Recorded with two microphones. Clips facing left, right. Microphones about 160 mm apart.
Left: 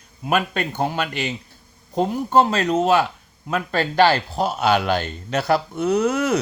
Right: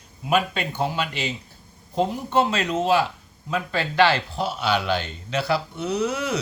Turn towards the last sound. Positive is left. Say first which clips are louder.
# left 5 dB
turn(degrees=50)  # may be behind; listen again after turning